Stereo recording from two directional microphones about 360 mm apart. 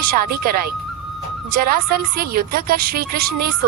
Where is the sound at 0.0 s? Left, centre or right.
Right.